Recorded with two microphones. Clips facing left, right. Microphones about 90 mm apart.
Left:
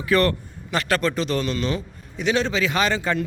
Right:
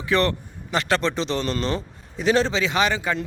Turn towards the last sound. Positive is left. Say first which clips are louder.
# even
turn(degrees=-15)  # may be behind; listen again after turning